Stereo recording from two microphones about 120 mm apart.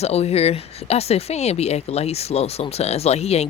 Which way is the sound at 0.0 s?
60° left (ahead or behind).